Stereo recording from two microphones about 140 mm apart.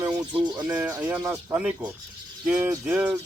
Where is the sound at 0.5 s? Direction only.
10° right (ahead or behind).